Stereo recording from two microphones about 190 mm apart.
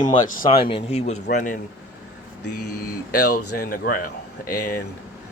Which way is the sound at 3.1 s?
50° left (ahead or behind).